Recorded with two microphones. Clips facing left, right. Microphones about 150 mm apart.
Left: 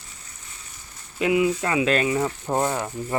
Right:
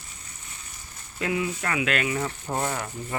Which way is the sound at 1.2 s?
20° left (ahead or behind).